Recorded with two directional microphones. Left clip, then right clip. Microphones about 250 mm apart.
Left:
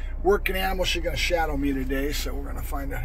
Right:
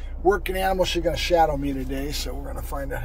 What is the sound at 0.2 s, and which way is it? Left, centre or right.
Speech, centre.